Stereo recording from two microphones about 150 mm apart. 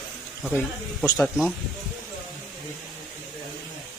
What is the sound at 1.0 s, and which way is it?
Speech, 20° left (ahead or behind).